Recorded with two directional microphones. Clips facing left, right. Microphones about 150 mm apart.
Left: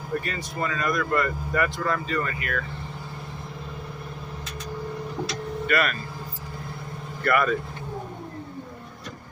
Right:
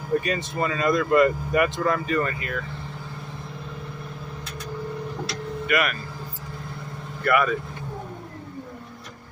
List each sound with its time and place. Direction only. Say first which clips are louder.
0.2 s speech: right 4 dB; 20° right (ahead or behind)
5.6 s speech: even; 10° right (ahead or behind)
7.3 s speech: right 1 dB; 10° right (ahead or behind)